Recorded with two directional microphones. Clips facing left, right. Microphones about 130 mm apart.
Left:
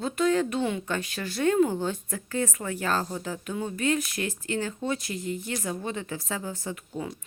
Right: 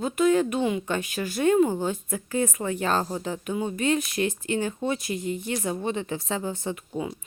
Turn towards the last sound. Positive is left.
turn(degrees=-15)  # may be behind; listen again after turning